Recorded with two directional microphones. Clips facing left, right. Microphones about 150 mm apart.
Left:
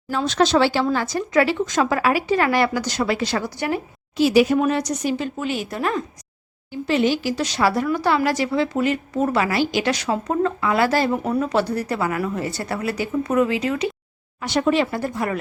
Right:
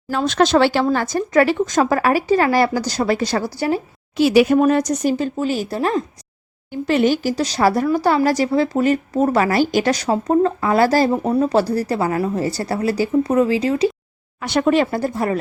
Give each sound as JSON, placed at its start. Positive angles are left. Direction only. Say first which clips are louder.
{"t": 0.1, "sound": "speech", "louder": "right 3 dB", "side_deg": -55}
{"t": 0.9, "sound": "speech", "louder": "right 3 dB", "side_deg": -45}
{"t": 4.2, "sound": "speech", "louder": "right 2 dB", "side_deg": -65}
{"t": 4.5, "sound": "speech", "louder": "right 5 dB", "side_deg": -45}
{"t": 6.7, "sound": "speech", "louder": "right 3 dB", "side_deg": -50}
{"t": 14.4, "sound": "speech", "louder": "right 3 dB", "side_deg": -55}
{"t": 14.8, "sound": "speech", "louder": "right 4 dB", "side_deg": -35}